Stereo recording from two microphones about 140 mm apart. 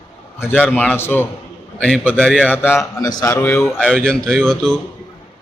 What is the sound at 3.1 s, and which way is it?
Speech, 30° left (ahead or behind).